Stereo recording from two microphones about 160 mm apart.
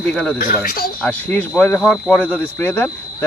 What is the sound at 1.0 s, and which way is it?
Speech, 10° left (ahead or behind).